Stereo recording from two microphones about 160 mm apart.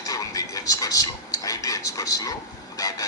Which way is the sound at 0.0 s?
20° left (ahead or behind).